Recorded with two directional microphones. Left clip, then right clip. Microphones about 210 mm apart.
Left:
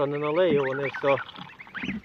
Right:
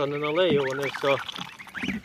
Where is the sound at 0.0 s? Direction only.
20° left (ahead or behind).